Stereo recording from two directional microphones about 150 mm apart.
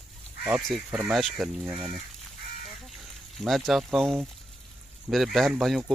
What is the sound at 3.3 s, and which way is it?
Speech, centre (ahead or behind).